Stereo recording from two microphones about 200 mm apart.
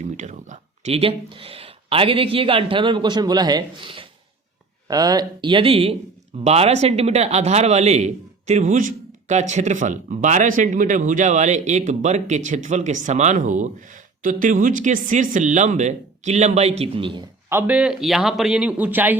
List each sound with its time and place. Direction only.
0.0 s speech: 35° right (ahead or behind)
17.5 s speech: 10° right (ahead or behind)